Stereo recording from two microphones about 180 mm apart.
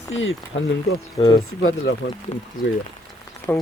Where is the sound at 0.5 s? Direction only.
85° left.